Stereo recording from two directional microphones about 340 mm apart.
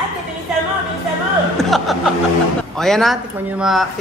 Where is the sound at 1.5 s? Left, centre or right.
Centre.